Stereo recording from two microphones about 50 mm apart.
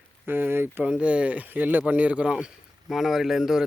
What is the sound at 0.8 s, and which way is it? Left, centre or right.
Speech, right.